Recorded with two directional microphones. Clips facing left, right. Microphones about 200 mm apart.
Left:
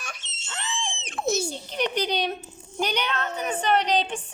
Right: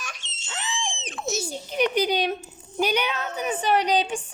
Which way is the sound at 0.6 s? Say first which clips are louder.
Right 1 dB; 15° right (ahead or behind).